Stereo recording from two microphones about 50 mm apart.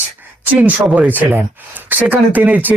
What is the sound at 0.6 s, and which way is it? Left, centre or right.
Speech, right.